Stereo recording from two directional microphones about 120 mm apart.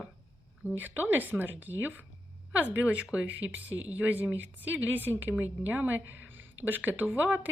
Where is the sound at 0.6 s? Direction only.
15° right (ahead or behind).